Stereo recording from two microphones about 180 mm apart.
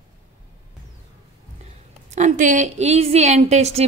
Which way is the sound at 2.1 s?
40° right (ahead or behind).